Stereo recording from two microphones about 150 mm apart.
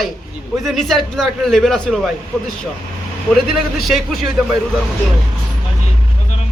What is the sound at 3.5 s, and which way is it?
Speech, centre (ahead or behind).